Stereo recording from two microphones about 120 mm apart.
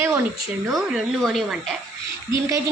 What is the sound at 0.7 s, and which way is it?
Speech, centre (ahead or behind).